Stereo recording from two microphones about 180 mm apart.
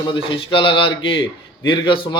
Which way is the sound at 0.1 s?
30° left (ahead or behind).